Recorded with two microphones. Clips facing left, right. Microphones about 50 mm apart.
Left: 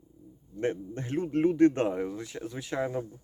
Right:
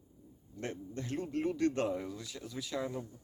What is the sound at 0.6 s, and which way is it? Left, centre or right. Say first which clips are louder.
Speech: left 9 dB; left.